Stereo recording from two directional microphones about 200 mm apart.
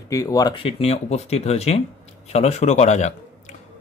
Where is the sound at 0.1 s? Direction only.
15° left (ahead or behind).